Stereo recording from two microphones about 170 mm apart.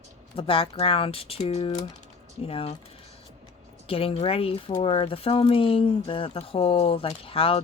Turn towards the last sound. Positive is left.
turn(degrees=30)  # may be behind; listen again after turning